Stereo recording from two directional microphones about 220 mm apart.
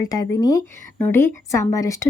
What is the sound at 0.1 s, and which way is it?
A woman's voice, 15° left (ahead or behind).